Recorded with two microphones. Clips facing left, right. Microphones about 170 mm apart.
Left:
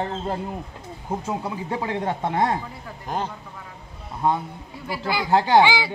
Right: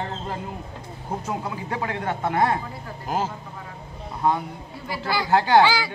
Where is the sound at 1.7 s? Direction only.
30° left (ahead or behind).